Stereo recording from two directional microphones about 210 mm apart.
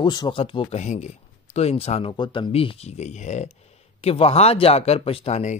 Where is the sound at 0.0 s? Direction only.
20° left (ahead or behind).